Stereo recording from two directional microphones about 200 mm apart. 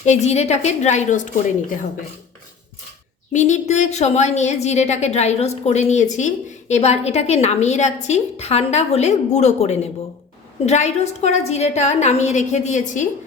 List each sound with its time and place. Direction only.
0.0 s a woman's voice: 35° left (ahead or behind)
3.3 s a woman's voice: 35° left (ahead or behind)